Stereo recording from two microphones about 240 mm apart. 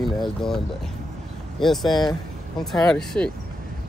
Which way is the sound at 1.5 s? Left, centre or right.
Centre.